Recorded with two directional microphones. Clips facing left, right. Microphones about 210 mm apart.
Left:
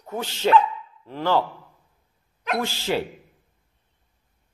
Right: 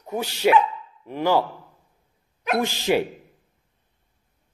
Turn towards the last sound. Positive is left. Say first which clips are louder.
# right 4 dB
turn(degrees=-15)  # may be behind; listen again after turning